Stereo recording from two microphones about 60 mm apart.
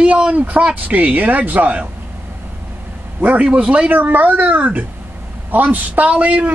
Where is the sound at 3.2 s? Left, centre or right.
Right.